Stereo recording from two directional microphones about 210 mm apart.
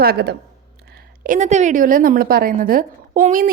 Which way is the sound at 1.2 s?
35° right (ahead or behind).